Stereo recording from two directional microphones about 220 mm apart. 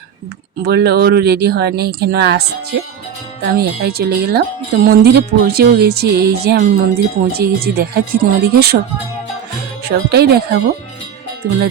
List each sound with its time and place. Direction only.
0.6 s speech: 45° right (ahead or behind)
9.9 s speech: 45° right (ahead or behind)